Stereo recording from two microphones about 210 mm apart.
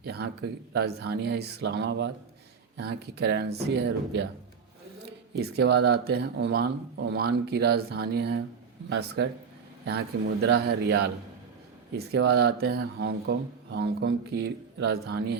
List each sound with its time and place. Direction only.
0.0 s speech: 50° right (ahead or behind)
5.4 s speech: 50° right (ahead or behind)